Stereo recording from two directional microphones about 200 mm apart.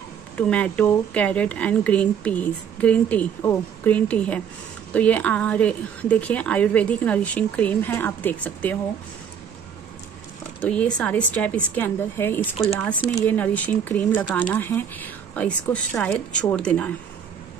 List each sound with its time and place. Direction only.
0.4 s a woman's voice: 5° left (ahead or behind)
10.6 s a woman's voice: 5° left (ahead or behind)
13.4 s a woman's voice: 10° left (ahead or behind)